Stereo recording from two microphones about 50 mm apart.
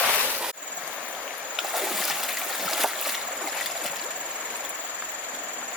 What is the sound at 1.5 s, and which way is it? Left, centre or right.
Boat, centre.